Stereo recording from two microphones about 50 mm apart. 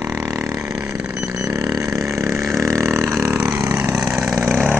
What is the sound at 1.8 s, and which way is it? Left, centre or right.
Vehicle, right.